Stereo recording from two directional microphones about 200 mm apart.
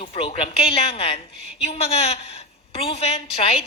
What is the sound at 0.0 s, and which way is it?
A woman's voice, 25° left (ahead or behind).